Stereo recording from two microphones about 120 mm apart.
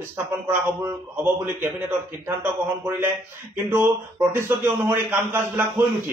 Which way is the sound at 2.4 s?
20° right (ahead or behind).